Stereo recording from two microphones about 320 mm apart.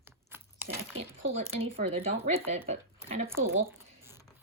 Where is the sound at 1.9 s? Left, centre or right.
Centre.